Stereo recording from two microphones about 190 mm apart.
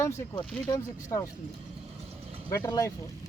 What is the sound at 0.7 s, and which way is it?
Speech, 15° left (ahead or behind).